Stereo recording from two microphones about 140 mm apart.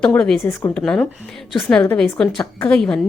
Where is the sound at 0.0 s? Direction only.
5° left (ahead or behind).